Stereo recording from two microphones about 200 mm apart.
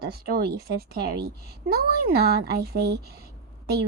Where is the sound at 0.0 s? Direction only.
50° right (ahead or behind).